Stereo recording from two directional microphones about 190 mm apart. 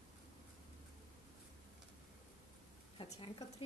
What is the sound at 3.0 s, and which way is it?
Speech, 25° left (ahead or behind).